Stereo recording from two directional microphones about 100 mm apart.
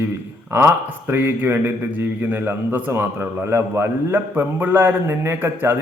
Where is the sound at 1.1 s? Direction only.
20° right (ahead or behind).